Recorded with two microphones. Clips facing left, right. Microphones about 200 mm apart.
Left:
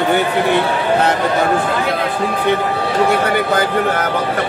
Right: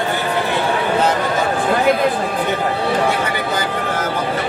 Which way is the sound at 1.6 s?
50° right (ahead or behind).